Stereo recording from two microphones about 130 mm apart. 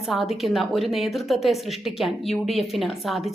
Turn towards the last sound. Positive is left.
turn(degrees=0)  # may be behind; listen again after turning